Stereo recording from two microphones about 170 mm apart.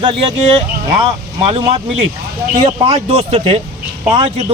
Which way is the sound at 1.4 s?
35° right (ahead or behind).